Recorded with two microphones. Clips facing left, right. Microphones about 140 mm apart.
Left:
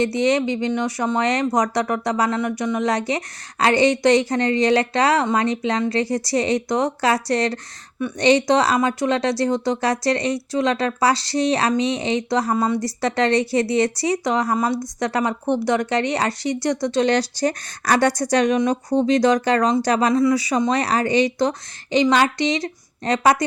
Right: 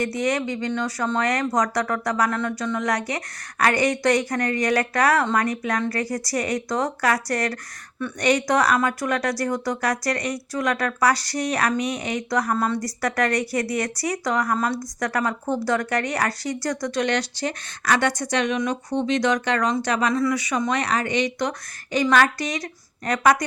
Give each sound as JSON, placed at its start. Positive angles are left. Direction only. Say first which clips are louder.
{"t": 0.0, "sound": "speech", "louder": "left 5 dB", "side_deg": 25}
{"t": 12.5, "sound": "speech", "louder": "left 3 dB", "side_deg": 15}
{"t": 12.8, "sound": "speech", "louder": "left 3 dB", "side_deg": 25}
{"t": 21.9, "sound": "speech", "louder": "left 2 dB", "side_deg": 20}